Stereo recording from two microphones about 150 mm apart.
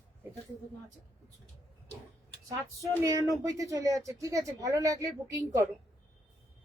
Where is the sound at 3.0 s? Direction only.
20° right (ahead or behind).